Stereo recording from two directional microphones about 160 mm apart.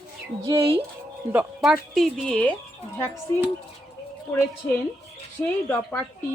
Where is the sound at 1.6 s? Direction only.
Centre (ahead or behind).